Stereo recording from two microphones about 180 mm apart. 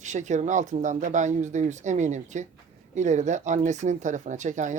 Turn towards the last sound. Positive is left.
turn(degrees=-45)  # may be behind; listen again after turning